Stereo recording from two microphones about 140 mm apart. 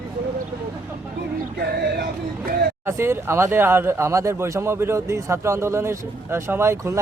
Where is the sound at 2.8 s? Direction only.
15° right (ahead or behind).